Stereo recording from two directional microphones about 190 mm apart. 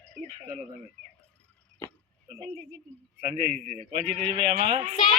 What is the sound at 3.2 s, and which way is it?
Speech, 40° right (ahead or behind).